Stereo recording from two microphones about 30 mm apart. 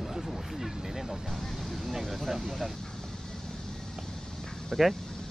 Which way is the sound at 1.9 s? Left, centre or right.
Centre.